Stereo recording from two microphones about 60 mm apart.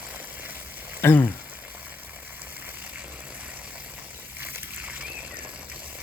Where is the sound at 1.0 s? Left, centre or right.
Left.